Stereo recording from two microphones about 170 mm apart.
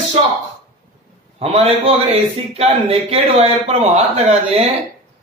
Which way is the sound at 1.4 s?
35° right (ahead or behind).